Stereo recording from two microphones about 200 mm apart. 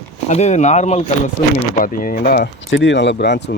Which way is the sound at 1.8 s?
45° left (ahead or behind).